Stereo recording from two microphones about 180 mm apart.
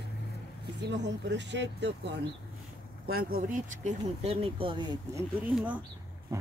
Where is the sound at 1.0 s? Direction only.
75° right (ahead or behind).